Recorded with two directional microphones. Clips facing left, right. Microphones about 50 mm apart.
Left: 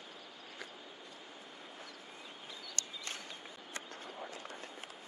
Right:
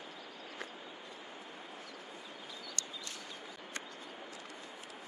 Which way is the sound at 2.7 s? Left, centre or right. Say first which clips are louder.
Left 4 dB; left.